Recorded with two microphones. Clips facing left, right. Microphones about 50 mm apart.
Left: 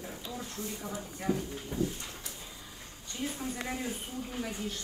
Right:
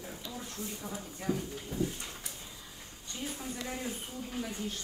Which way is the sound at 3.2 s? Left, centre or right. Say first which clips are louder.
Left 3 dB; left.